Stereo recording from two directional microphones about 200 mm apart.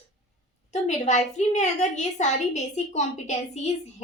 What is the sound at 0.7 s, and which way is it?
A woman's voice, 35° left (ahead or behind).